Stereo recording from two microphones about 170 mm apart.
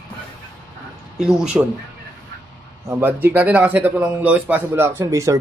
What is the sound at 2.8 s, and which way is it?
Speech, 15° right (ahead or behind).